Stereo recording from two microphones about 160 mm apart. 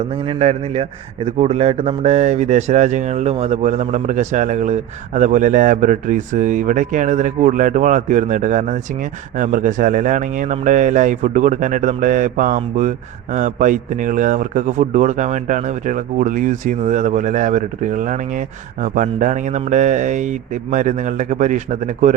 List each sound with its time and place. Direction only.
0.1 s a man's voice: 40° right (ahead or behind)